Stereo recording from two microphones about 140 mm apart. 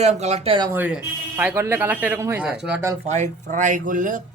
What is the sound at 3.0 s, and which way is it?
Speech, 55° right (ahead or behind).